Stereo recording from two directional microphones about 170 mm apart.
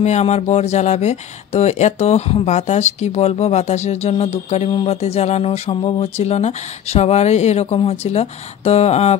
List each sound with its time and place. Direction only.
0.0 s speech: 40° left (ahead or behind)